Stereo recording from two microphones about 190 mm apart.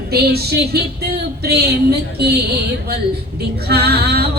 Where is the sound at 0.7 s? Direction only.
55° right (ahead or behind).